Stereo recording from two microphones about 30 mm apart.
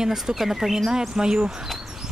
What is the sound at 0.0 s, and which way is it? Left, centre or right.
Speech, centre.